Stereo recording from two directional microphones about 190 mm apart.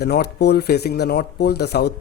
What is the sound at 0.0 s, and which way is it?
Speech, 60° left (ahead or behind).